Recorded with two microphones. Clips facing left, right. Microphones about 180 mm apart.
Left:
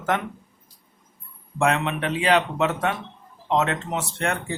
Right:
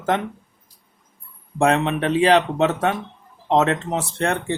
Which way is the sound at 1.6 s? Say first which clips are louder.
Right 4 dB; 35° right (ahead or behind).